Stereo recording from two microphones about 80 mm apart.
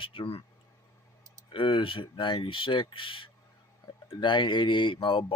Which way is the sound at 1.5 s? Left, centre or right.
Left.